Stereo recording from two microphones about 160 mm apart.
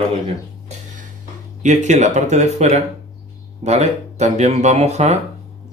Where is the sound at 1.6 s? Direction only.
45° right (ahead or behind).